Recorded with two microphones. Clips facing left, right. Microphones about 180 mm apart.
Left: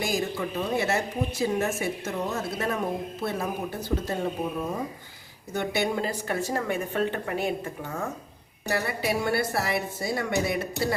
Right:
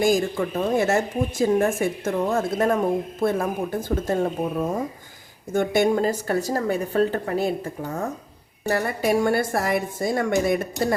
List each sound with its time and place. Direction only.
0.0 s a woman's voice: 50° right (ahead or behind)
5.5 s a woman's voice: 45° right (ahead or behind)